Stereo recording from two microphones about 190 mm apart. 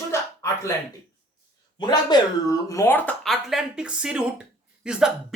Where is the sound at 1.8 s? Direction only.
20° left (ahead or behind); by 5.1 s 5° right (ahead or behind).